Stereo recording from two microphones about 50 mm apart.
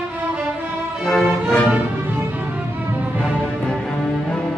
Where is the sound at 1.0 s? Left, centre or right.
Centre.